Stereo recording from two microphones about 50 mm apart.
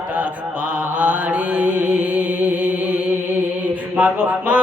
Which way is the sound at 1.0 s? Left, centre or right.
Right.